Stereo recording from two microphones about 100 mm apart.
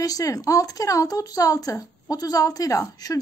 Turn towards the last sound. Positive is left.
turn(degrees=35)  # may be behind; listen again after turning